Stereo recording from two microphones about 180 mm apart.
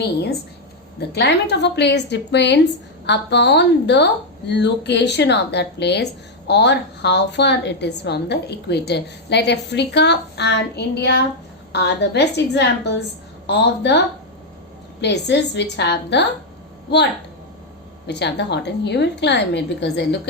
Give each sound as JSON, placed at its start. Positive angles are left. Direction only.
{"t": 0.0, "sound": "a woman's voice", "side_deg": 65}
{"t": 15.0, "sound": "a woman's voice", "side_deg": 70}
{"t": 18.1, "sound": "a woman's voice", "side_deg": 70}